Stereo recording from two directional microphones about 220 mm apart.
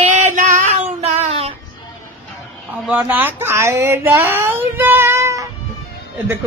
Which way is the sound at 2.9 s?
5° right (ahead or behind).